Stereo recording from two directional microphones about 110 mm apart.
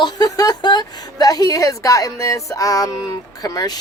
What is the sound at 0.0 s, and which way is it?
A woman's voice, 35° left (ahead or behind).